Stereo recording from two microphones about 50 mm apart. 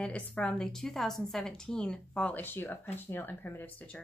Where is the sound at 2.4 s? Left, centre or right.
Left.